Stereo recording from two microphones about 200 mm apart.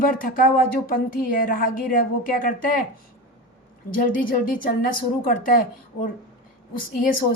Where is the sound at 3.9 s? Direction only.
45° left (ahead or behind).